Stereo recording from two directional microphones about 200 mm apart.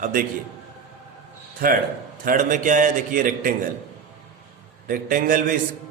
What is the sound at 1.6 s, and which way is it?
A man's voice, 50° right (ahead or behind).